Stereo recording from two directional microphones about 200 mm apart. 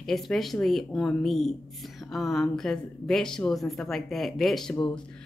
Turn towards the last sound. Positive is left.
turn(degrees=0)  # may be behind; listen again after turning